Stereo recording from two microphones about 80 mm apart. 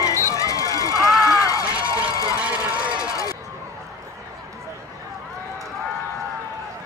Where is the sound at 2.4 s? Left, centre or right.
Centre.